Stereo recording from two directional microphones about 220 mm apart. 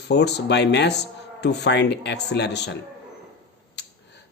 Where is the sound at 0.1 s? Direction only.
50° left (ahead or behind).